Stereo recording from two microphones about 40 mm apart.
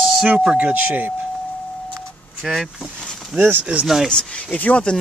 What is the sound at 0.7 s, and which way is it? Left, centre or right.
Speech, right.